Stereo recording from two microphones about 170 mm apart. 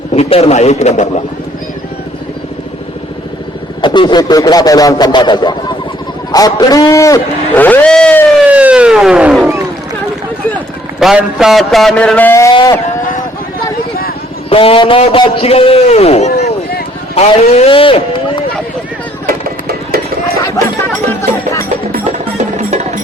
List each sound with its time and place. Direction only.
0.1 s a man's voice: 35° left (ahead or behind)
3.8 s a man's voice: 30° left (ahead or behind); by 8.4 s 5° left (ahead or behind)
8.4 s police car: 10° right (ahead or behind)
11.0 s a man's voice: 5° right (ahead or behind); by 12.8 s 20° left (ahead or behind)
14.5 s a man's voice: 30° left (ahead or behind)
19.2 s music: 65° right (ahead or behind)
21.2 s music: 15° left (ahead or behind)
22.4 s music: 45° right (ahead or behind)